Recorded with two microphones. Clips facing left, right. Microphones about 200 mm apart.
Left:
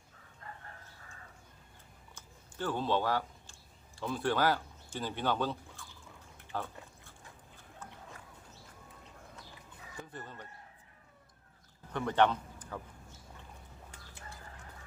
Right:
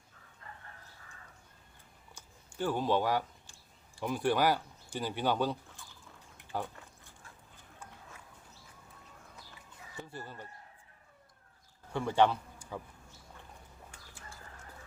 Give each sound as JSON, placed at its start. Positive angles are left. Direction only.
{"t": 2.1, "sound": "chewing", "side_deg": -15}
{"t": 3.9, "sound": "speech", "side_deg": -15}
{"t": 6.3, "sound": "a sound", "side_deg": -15}
{"t": 10.2, "sound": "speech", "side_deg": -10}
{"t": 11.9, "sound": "a man's voice", "side_deg": -10}